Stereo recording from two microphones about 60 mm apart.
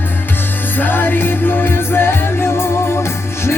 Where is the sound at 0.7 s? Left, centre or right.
Left.